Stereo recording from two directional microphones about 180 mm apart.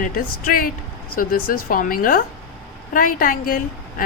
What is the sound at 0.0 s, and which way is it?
A woman's voice, 50° left (ahead or behind).